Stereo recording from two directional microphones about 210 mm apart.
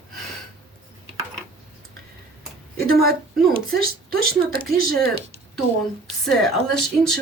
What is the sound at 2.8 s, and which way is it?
Speech, 45° right (ahead or behind).